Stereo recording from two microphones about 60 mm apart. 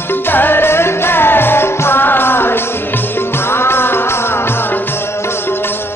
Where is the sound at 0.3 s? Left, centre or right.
Left.